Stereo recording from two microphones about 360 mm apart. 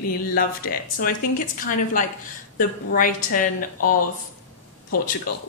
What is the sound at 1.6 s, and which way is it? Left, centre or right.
A woman's voice, left.